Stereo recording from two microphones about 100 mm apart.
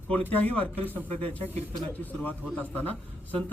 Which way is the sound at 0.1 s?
15° left (ahead or behind).